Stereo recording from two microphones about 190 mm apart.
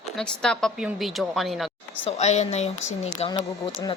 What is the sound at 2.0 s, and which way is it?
A woman's voice, 35° left (ahead or behind).